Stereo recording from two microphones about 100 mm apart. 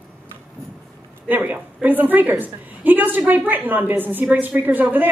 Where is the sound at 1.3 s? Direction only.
15° right (ahead or behind).